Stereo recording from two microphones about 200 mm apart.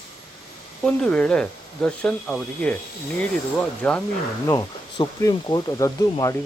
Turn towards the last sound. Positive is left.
turn(degrees=15)  # may be behind; listen again after turning